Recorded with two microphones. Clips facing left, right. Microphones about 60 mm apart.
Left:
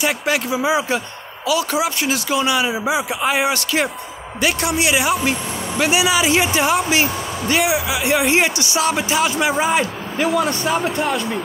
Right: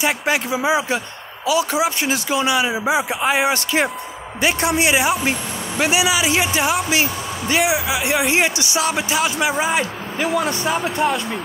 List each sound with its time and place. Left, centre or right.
0.0 s speech: centre